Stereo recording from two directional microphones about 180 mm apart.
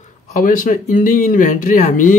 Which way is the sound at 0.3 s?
45° left (ahead or behind).